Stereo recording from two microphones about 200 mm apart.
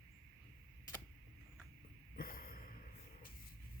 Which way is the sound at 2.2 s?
45° left (ahead or behind).